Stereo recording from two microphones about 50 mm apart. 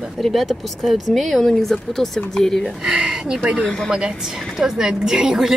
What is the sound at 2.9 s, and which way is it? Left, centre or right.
Speech, centre.